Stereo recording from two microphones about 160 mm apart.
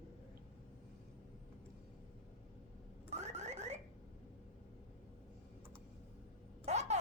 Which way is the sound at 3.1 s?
45° right (ahead or behind).